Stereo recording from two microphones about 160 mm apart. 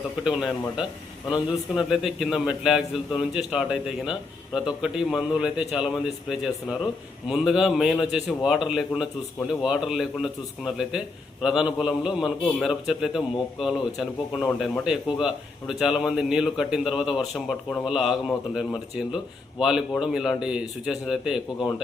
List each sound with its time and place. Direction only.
0.3 s a man's voice: 5° right (ahead or behind)